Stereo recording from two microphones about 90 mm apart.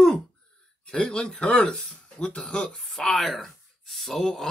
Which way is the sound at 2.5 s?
5° left (ahead or behind).